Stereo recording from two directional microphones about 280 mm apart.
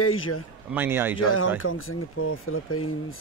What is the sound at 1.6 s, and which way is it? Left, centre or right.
Speech, left.